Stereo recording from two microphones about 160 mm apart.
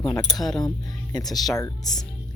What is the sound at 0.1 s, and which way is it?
Speech, 25° left (ahead or behind).